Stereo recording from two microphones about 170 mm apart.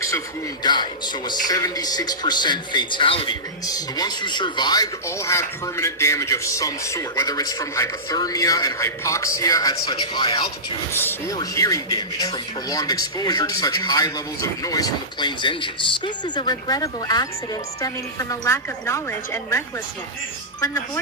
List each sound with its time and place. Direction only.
0.6 s speech: 25° left (ahead or behind)
10.9 s speech: 15° left (ahead or behind)